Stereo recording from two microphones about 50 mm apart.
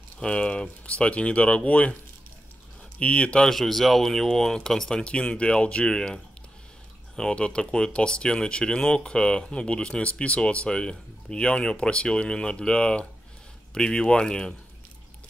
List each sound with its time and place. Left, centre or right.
0.2 s speech: centre
3.0 s speech: left
3.4 s speech: centre